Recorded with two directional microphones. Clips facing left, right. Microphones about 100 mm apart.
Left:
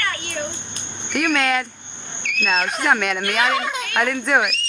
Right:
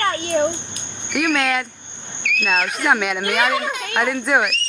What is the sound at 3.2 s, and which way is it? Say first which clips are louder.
Speech: right 1 dB; 15° right (ahead or behind).